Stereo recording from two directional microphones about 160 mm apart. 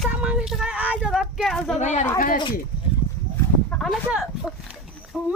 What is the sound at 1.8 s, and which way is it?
Speech, 45° left (ahead or behind).